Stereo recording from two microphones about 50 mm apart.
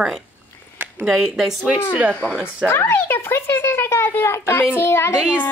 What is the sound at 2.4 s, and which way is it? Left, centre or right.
A woman's voice, left.